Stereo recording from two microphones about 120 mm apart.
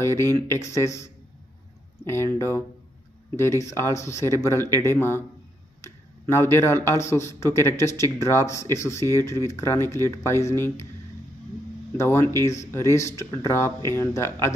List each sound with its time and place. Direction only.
0.0 s speech: 20° left (ahead or behind)
12.0 s speech: 20° left (ahead or behind)